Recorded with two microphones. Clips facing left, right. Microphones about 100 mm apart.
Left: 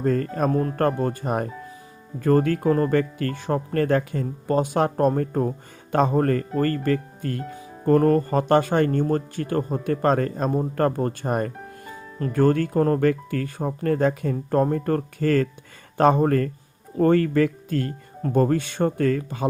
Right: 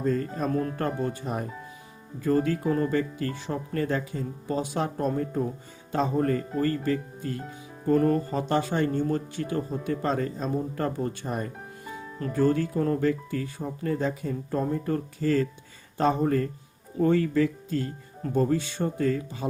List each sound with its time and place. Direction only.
0.0 s speech: 60° left (ahead or behind)